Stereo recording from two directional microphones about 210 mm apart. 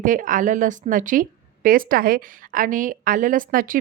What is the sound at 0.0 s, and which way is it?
A woman's voice, 40° right (ahead or behind).